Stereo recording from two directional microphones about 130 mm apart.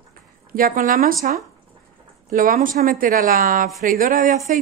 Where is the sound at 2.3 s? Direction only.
90° right.